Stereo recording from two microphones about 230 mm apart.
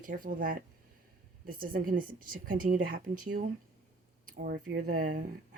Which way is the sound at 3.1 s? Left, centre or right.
Right.